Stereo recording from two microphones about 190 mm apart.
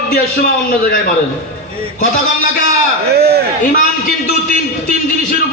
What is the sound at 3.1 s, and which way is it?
Speech, 55° right (ahead or behind).